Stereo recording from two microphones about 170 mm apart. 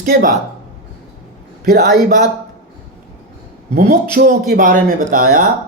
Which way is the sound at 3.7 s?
60° right (ahead or behind).